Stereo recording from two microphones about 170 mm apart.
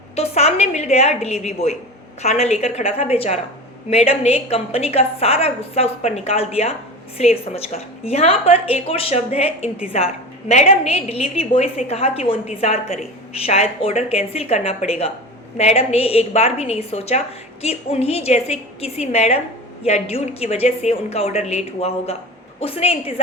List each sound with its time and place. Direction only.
0.2 s a woman's voice: 40° left (ahead or behind)